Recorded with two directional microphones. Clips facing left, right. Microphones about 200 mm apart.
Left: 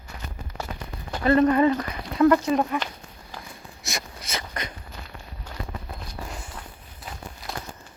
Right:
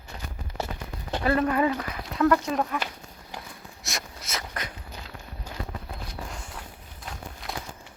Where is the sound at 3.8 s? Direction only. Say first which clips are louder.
Left 2 dB; centre (ahead or behind).